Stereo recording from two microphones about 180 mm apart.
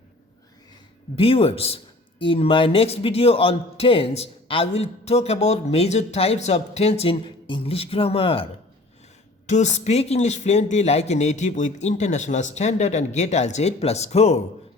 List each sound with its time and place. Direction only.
1.1 s speech: 30° left (ahead or behind)
9.5 s speech: 40° left (ahead or behind)